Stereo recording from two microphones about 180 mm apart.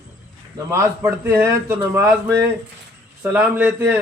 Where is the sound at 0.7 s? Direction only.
15° right (ahead or behind).